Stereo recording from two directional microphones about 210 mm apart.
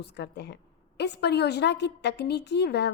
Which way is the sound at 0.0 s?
55° left (ahead or behind).